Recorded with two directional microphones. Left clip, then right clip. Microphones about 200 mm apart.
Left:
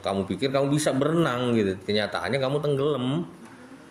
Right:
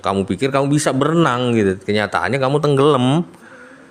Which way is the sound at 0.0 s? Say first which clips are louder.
Right 8 dB; 45° right (ahead or behind).